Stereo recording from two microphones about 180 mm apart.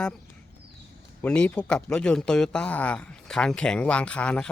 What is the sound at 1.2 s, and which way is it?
Speech, 5° left (ahead or behind).